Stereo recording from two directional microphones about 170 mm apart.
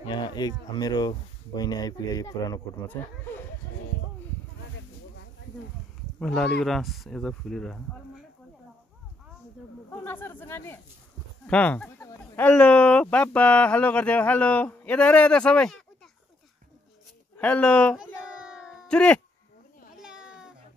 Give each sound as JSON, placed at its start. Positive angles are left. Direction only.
{"t": 0.0, "sound": "a sound", "side_deg": 25}
{"t": 0.7, "sound": "speech", "side_deg": 25}
{"t": 6.1, "sound": "speech", "side_deg": 5}
{"t": 9.8, "sound": "snake", "side_deg": 15}
{"t": 10.4, "sound": "speech", "side_deg": 15}
{"t": 17.4, "sound": "speech", "side_deg": 10}
{"t": 17.9, "sound": "a sound", "side_deg": -5}
{"t": 18.9, "sound": "speech", "side_deg": 5}
{"t": 20.0, "sound": "cat", "side_deg": -5}